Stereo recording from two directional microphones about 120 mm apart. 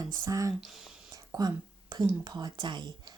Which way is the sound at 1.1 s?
30° right (ahead or behind).